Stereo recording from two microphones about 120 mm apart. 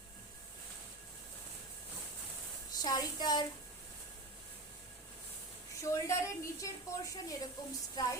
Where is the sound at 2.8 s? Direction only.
35° left (ahead or behind).